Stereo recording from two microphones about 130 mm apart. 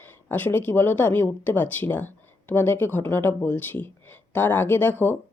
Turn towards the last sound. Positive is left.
turn(degrees=15)  # may be behind; listen again after turning